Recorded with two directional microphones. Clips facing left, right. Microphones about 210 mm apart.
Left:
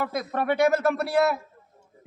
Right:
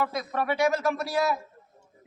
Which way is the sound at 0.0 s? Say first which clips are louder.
Left 1 dB; 50° left (ahead or behind).